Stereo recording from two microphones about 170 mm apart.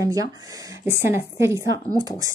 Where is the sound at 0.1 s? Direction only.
20° right (ahead or behind).